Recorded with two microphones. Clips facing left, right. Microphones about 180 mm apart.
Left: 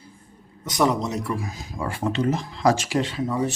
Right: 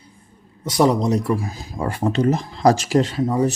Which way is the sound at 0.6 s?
30° right (ahead or behind).